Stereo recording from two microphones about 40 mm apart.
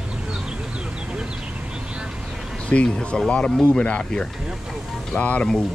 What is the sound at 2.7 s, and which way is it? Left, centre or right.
Speech, left.